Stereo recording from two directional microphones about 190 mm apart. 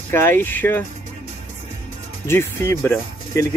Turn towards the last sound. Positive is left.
turn(degrees=15)  # may be behind; listen again after turning